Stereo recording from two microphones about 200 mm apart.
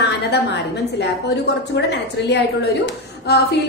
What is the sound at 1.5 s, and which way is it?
A woman's voice, 60° left (ahead or behind).